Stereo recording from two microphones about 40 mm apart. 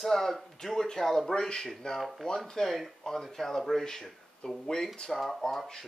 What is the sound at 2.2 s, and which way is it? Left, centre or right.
Speech, centre.